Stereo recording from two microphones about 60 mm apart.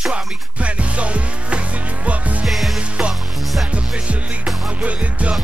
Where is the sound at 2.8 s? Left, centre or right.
Centre.